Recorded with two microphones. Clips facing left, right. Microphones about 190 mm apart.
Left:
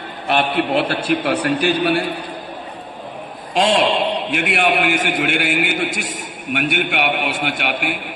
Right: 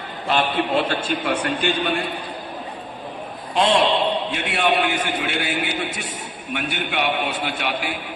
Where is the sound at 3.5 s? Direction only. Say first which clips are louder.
Left 2 dB; 80° left.